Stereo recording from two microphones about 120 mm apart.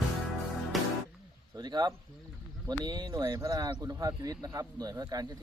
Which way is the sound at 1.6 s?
35° right (ahead or behind).